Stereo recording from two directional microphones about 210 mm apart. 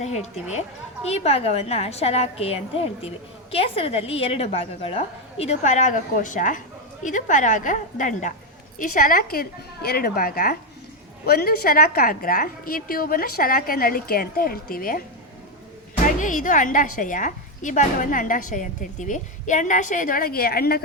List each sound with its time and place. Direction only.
0.0 s a woman's voice: 35° left (ahead or behind)
16.0 s a woman's voice: 40° left (ahead or behind)